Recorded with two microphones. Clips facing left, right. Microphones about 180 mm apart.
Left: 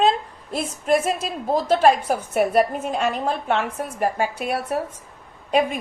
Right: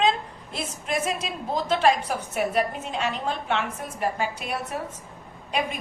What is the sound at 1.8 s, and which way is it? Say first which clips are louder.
A woman's voice: left 5 dB; 50° left (ahead or behind).